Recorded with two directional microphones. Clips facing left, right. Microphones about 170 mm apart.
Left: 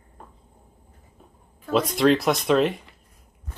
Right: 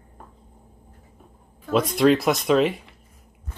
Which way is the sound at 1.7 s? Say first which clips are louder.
Right 1 dB; centre (ahead or behind).